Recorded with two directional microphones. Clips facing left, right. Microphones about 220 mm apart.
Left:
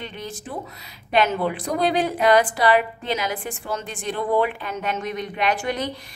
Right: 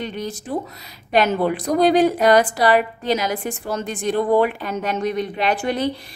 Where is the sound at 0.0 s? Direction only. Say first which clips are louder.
Right 6 dB; 40° right (ahead or behind).